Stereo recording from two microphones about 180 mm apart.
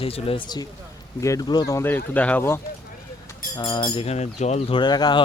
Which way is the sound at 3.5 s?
25° left (ahead or behind).